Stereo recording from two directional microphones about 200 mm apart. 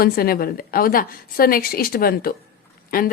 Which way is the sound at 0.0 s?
50° left (ahead or behind).